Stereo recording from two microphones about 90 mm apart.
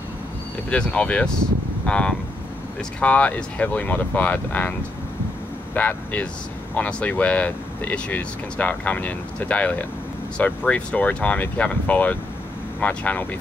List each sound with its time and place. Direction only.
0.7 s speech: 10° left (ahead or behind)
5.8 s speech: 20° left (ahead or behind)